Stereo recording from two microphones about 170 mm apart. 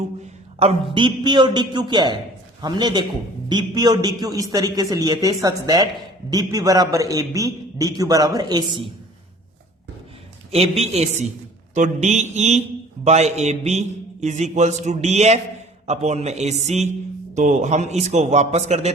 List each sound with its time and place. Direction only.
0.6 s a man's voice: 35° right (ahead or behind)
10.5 s a man's voice: 40° right (ahead or behind)